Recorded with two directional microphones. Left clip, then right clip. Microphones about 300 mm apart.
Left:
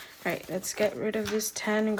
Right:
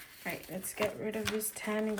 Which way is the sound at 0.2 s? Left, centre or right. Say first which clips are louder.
Left 9 dB; centre.